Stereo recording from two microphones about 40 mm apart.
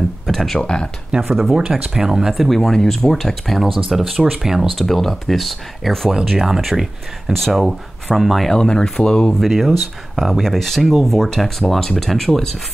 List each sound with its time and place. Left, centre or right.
0.3 s speech: centre
0.6 s speech: left
1.3 s speech: centre
2.3 s speech: centre
4.7 s speech: centre
6.0 s speech: centre
6.6 s speech: centre
8.5 s speech: centre
9.3 s speech: centre